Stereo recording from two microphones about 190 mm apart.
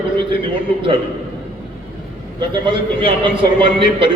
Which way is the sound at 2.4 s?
25° right (ahead or behind).